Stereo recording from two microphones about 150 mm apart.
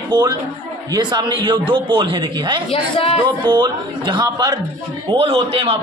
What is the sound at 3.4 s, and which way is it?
A man's voice, 30° right (ahead or behind).